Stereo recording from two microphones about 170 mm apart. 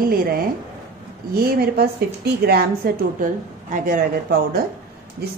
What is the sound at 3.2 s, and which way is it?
Speech, 50° right (ahead or behind).